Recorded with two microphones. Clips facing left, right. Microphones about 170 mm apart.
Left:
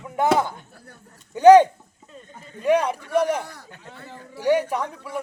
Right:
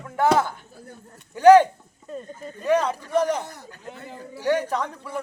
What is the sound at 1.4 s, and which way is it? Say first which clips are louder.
Speech: left 2 dB; 20° left (ahead or behind).